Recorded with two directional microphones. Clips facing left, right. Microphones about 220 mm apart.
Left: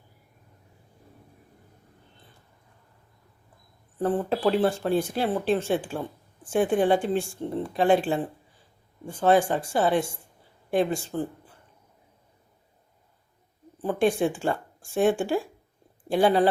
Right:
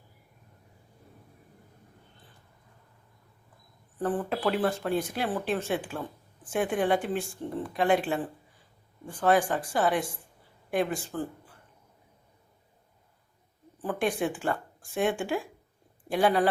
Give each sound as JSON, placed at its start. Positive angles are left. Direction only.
{"t": 3.9, "sound": "speech", "side_deg": 25}
{"t": 13.8, "sound": "speech", "side_deg": 30}